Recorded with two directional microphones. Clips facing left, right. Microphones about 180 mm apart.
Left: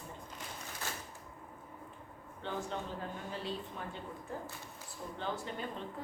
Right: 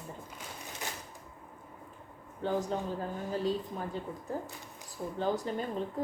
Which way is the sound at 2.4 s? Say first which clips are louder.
Right 7 dB; 40° right (ahead or behind).